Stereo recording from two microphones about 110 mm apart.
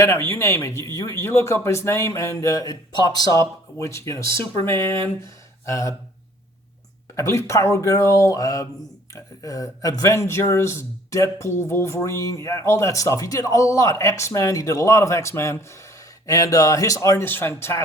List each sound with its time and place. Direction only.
0.0 s speech: 25° left (ahead or behind)
5.2 s speech: 30° left (ahead or behind)
7.2 s speech: 25° left (ahead or behind)